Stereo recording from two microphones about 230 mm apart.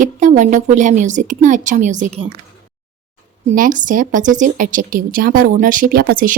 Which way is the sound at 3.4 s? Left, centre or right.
Right.